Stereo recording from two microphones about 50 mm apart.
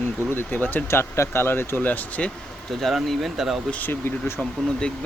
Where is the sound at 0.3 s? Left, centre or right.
Left.